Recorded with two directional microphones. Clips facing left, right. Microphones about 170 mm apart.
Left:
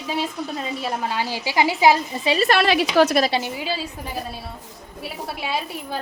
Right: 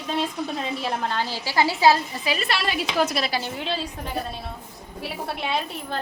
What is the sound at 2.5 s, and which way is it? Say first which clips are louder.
Speech: left 8 dB; 75° left (ahead or behind).